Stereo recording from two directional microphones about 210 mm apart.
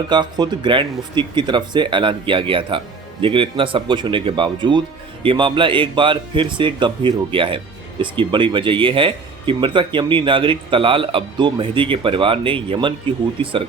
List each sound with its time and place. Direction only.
0.1 s speech: 20° right (ahead or behind)